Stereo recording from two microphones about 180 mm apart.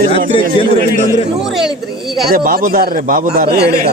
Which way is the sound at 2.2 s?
55° right (ahead or behind).